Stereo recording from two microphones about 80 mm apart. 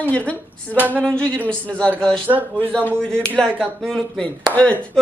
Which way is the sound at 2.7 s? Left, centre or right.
Centre.